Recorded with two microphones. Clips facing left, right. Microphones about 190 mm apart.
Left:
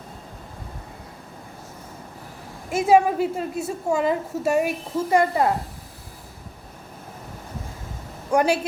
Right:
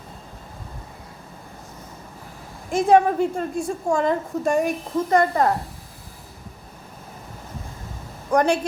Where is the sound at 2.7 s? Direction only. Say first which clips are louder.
Right 1 dB; 5° left (ahead or behind).